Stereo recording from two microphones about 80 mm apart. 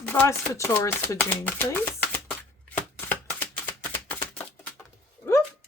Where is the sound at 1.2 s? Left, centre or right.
Left.